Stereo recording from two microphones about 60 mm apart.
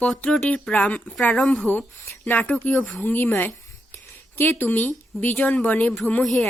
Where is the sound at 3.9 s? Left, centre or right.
Left.